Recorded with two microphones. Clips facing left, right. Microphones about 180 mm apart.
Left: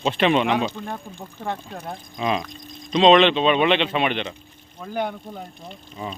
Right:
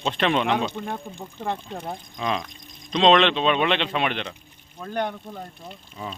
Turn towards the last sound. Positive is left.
turn(degrees=5)  # may be behind; listen again after turning